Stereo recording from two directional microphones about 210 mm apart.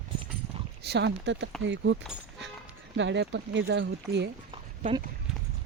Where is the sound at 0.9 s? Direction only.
55° right (ahead or behind).